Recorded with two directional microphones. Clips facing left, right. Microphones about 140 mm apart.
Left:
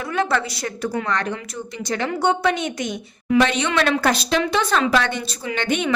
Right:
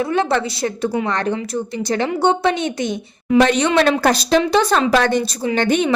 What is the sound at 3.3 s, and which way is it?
Speech, 40° right (ahead or behind).